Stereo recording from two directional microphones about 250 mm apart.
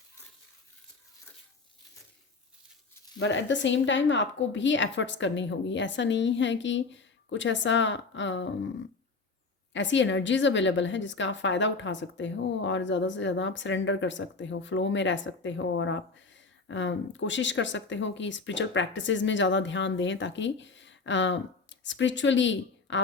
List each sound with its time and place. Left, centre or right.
3.2 s a woman's voice: left
9.7 s a woman's voice: left